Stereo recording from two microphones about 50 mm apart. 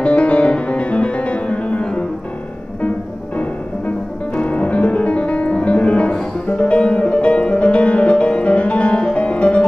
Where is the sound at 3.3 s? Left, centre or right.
Left.